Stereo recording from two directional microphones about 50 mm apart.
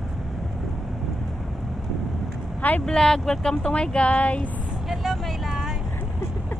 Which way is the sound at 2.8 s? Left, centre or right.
Centre.